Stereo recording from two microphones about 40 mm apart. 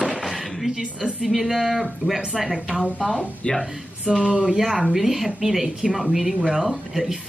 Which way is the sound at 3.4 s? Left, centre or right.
Left.